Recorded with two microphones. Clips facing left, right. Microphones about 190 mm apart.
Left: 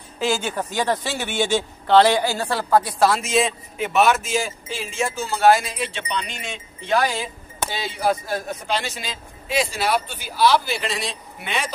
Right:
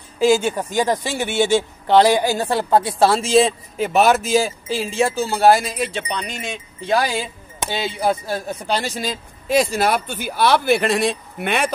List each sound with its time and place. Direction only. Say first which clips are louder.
0.2 s speech: right 7 dB; 10° right (ahead or behind); by 7.2 s 35° right (ahead or behind)
7.7 s speech: right 2 dB; 25° right (ahead or behind); by 11.7 s 55° right (ahead or behind)